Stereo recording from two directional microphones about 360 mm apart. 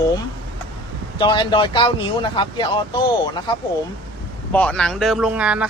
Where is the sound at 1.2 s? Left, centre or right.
Centre.